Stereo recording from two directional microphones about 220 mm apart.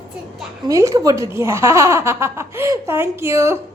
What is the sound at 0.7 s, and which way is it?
Speech, 15° right (ahead or behind).